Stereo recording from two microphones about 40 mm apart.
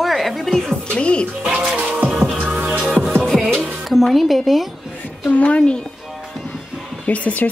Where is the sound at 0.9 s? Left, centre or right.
Left.